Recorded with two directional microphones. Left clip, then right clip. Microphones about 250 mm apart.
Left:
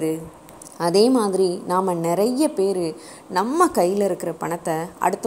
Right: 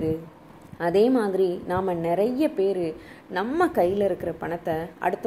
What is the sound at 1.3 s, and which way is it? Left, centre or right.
Speech, left.